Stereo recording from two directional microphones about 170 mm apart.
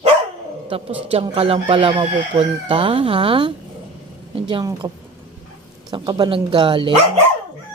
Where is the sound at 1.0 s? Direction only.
30° right (ahead or behind).